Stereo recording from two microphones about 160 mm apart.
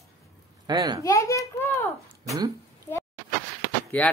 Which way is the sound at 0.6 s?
25° right (ahead or behind).